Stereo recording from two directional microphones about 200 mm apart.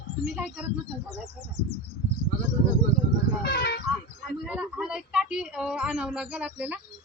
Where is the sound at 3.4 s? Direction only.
55° left (ahead or behind).